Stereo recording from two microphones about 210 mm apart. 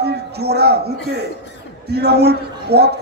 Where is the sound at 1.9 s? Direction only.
50° right (ahead or behind).